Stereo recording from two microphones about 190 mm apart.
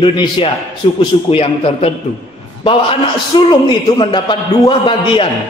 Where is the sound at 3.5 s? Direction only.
25° left (ahead or behind).